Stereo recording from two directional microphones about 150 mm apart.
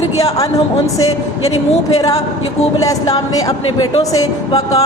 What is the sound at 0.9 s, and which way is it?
Speech, 25° left (ahead or behind).